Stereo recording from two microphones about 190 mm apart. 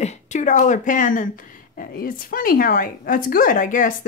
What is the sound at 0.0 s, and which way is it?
Speech, 40° left (ahead or behind).